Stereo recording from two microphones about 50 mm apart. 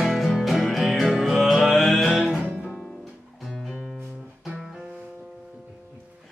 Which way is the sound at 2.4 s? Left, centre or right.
Right.